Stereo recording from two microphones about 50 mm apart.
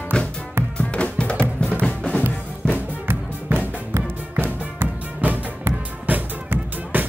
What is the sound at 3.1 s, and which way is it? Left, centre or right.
Music, right.